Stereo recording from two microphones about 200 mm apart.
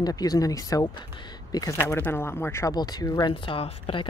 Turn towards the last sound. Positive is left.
turn(degrees=25)  # may be behind; listen again after turning